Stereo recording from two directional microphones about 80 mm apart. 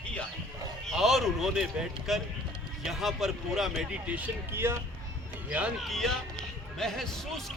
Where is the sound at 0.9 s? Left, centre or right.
Centre.